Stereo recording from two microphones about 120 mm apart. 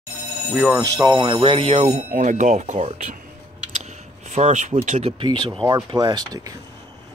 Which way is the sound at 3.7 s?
70° right (ahead or behind).